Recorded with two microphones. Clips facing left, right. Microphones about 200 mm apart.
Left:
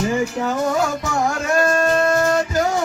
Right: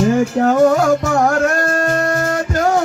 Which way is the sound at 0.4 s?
65° right (ahead or behind).